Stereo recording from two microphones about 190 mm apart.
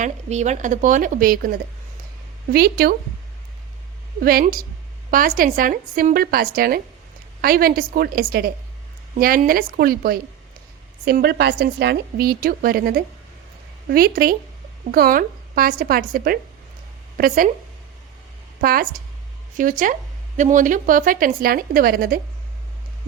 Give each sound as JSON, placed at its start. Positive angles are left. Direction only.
{"t": 0.0, "sound": "speech", "side_deg": -40}
{"t": 4.2, "sound": "a woman's voice", "side_deg": -50}
{"t": 18.6, "sound": "speech", "side_deg": -50}